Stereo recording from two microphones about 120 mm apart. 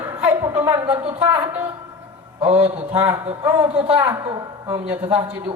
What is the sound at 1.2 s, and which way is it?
A man's voice, 10° right (ahead or behind).